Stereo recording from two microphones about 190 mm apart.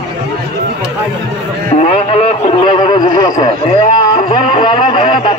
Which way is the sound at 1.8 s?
35° left (ahead or behind).